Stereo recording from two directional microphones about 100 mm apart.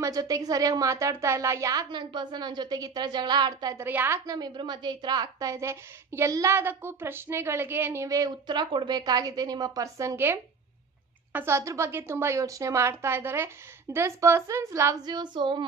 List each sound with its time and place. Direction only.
0.0 s a woman's voice: 35° right (ahead or behind)
3.7 s a woman's voice: 20° right (ahead or behind)
4.3 s a woman's voice: 45° right (ahead or behind)
8.5 s a woman's voice: 50° right (ahead or behind); by 15.0 s 30° right (ahead or behind)
15.0 s speech: 45° right (ahead or behind)